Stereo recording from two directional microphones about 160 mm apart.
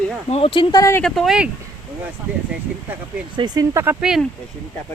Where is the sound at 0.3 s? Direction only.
40° left (ahead or behind); by 1.0 s 20° left (ahead or behind).